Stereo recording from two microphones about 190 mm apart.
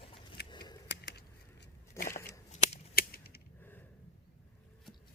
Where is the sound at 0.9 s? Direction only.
60° left (ahead or behind).